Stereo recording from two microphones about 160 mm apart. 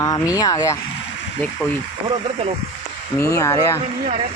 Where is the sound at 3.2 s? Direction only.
20° left (ahead or behind).